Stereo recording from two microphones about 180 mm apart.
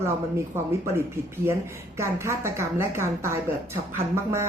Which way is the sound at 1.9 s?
15° right (ahead or behind).